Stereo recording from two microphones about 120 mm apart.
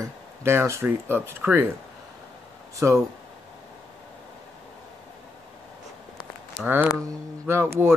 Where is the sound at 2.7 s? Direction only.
25° right (ahead or behind).